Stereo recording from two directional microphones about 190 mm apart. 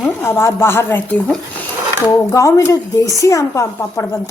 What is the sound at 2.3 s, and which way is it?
Speech, 15° left (ahead or behind).